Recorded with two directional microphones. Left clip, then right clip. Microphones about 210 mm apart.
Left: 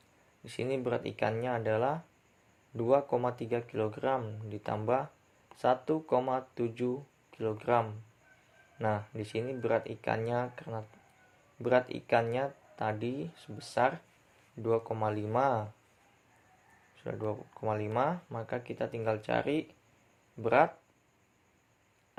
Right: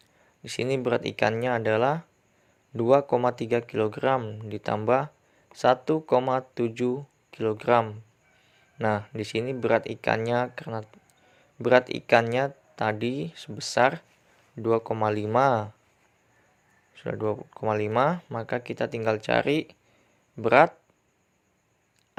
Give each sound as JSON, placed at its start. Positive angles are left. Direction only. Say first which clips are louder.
{"t": 0.4, "sound": "speech", "louder": "right 7 dB", "side_deg": -30}
{"t": 16.9, "sound": "speech", "louder": "right 8 dB", "side_deg": -30}